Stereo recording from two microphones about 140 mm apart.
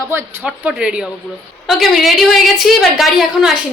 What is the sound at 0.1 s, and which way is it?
A woman's voice, 15° right (ahead or behind).